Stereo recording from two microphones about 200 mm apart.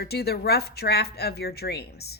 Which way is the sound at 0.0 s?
55° left (ahead or behind).